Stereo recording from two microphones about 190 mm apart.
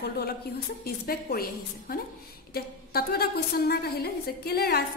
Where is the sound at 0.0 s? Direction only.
55° left (ahead or behind).